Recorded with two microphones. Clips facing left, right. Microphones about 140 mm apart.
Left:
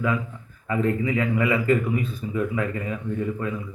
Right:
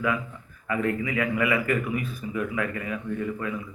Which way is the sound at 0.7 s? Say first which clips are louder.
Left 3 dB; 25° left (ahead or behind).